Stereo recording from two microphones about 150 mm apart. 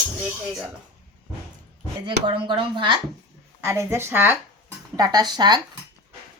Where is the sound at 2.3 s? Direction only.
35° right (ahead or behind).